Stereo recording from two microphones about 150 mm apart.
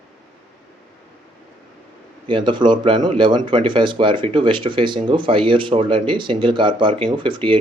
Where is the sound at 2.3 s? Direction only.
30° right (ahead or behind).